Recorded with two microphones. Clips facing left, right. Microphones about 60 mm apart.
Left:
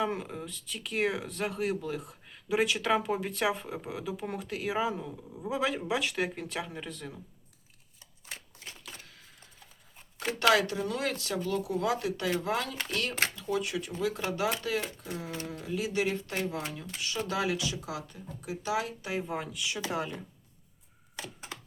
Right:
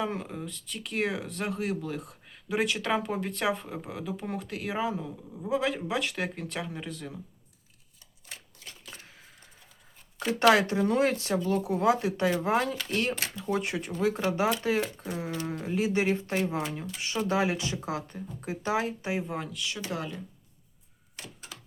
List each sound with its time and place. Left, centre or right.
0.0 s speech: centre
10.4 s speech: right
19.5 s speech: centre